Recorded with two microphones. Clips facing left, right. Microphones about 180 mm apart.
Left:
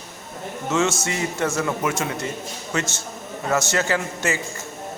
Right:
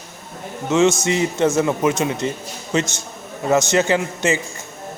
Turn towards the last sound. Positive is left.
turn(degrees=-20)  # may be behind; listen again after turning